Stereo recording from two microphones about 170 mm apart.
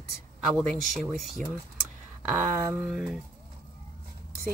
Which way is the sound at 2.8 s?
Centre (ahead or behind).